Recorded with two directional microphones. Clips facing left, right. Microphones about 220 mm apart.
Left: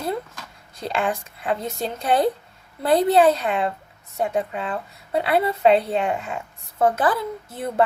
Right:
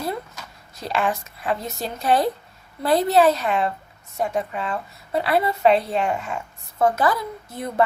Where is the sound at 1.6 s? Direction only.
30° left (ahead or behind).